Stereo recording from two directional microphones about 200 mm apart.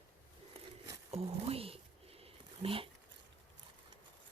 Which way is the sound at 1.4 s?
30° right (ahead or behind).